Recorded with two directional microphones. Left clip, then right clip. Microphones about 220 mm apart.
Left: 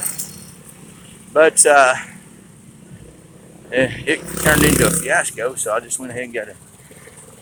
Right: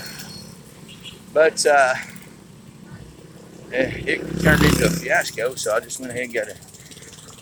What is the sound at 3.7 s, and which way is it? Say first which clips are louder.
Speech: left 4 dB; 15° left (ahead or behind).